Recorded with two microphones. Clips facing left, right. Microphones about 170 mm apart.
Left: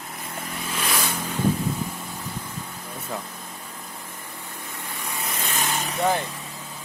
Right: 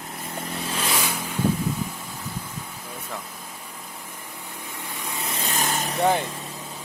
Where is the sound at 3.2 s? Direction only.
Centre (ahead or behind); by 5.4 s 20° right (ahead or behind).